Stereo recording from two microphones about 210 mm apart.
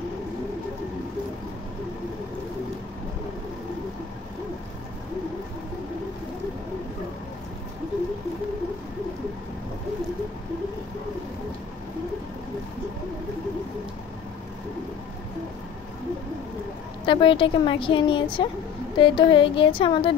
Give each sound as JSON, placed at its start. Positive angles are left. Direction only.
{"t": 17.0, "sound": "a woman's voice", "side_deg": 25}